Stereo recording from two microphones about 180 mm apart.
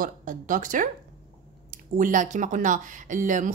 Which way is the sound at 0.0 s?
45° right (ahead or behind).